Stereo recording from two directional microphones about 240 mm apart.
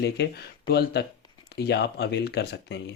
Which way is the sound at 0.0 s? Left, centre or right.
Left.